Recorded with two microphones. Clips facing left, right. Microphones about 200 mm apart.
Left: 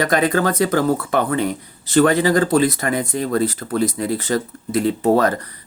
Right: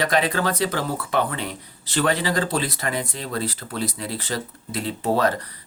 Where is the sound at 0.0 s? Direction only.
45° left (ahead or behind).